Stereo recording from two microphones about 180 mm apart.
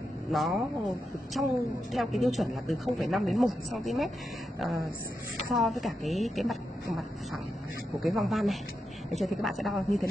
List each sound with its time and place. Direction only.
0.3 s a woman's voice: centre (ahead or behind)
5.5 s a woman's voice: centre (ahead or behind)
8.0 s a woman's voice: centre (ahead or behind)